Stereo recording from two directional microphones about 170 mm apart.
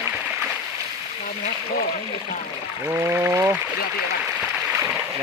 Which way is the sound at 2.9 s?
15° right (ahead or behind).